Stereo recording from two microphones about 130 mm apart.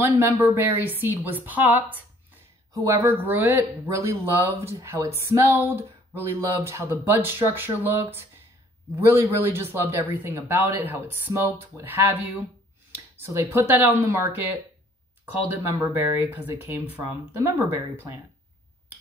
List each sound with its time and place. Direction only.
0.0 s speech: 20° right (ahead or behind)
9.4 s speech: 15° right (ahead or behind)
15.6 s speech: 15° right (ahead or behind)